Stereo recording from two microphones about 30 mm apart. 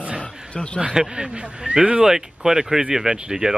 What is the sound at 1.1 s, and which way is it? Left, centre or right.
Speech, right.